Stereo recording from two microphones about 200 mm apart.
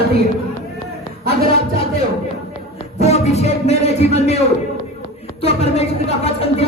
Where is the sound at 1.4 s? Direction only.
30° left (ahead or behind).